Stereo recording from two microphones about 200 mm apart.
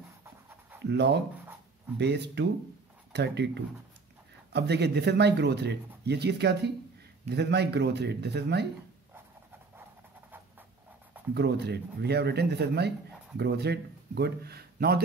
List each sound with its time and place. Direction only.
0.8 s speech: 60° right (ahead or behind)
11.3 s speech: 55° right (ahead or behind)